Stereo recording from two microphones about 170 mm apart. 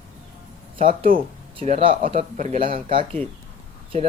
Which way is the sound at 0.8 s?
55° right (ahead or behind).